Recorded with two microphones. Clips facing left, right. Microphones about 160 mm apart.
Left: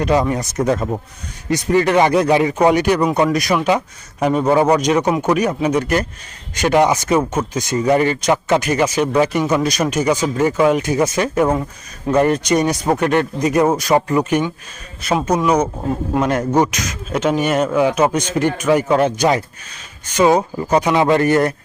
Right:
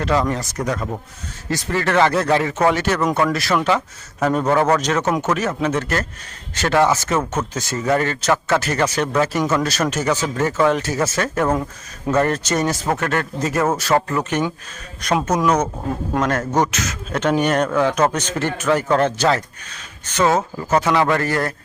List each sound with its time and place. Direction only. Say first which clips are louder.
0.0 s speech: left 3 dB; 15° left (ahead or behind)